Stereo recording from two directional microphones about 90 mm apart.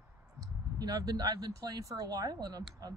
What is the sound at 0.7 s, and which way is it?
Speech, 45° right (ahead or behind).